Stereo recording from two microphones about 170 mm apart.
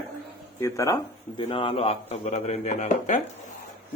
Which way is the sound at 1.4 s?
35° left (ahead or behind).